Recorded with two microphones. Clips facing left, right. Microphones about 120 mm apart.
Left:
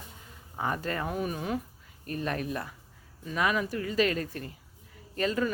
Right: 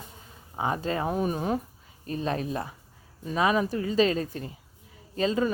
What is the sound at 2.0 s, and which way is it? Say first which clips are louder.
A woman's voice: right 3 dB; 25° right (ahead or behind).